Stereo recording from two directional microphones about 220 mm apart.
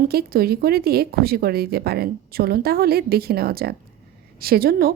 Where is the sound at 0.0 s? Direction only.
45° right (ahead or behind).